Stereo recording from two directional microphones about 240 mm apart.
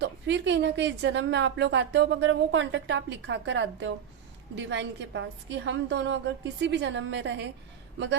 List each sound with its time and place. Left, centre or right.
0.0 s a woman's voice: right